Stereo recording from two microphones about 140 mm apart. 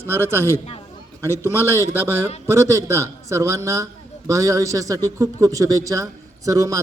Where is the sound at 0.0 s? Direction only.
15° right (ahead or behind).